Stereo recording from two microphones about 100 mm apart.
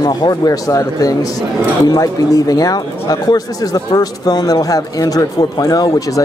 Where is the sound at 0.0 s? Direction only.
45° left (ahead or behind).